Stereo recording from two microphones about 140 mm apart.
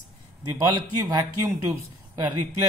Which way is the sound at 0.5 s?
25° right (ahead or behind).